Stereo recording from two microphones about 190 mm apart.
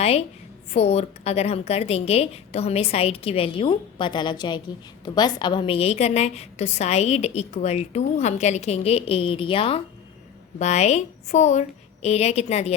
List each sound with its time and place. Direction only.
0.0 s a woman's voice: 35° left (ahead or behind)